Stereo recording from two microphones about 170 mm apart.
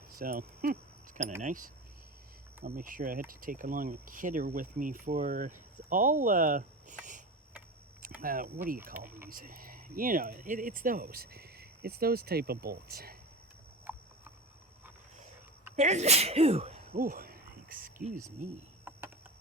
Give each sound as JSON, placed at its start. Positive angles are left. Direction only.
{"t": 0.1, "sound": "speech", "side_deg": -55}
{"t": 8.0, "sound": "speech", "side_deg": -55}
{"t": 9.0, "sound": "speech", "side_deg": -15}
{"t": 9.3, "sound": "speech", "side_deg": -55}
{"t": 15.7, "sound": "speech", "side_deg": -40}
{"t": 16.9, "sound": "a sound", "side_deg": -55}
{"t": 18.9, "sound": "a sound", "side_deg": -15}